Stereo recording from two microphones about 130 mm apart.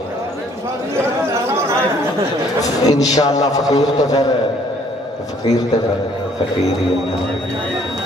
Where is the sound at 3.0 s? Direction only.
30° left (ahead or behind).